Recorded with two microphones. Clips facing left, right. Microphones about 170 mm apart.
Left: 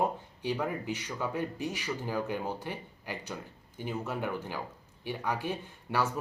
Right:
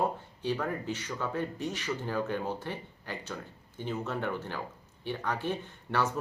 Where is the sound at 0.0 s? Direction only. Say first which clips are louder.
Even; 15° left (ahead or behind).